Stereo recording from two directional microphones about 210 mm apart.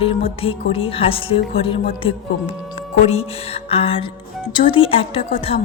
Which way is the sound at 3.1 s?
30° left (ahead or behind).